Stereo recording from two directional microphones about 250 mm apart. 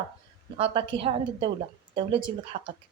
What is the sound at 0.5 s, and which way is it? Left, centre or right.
A woman's voice, right.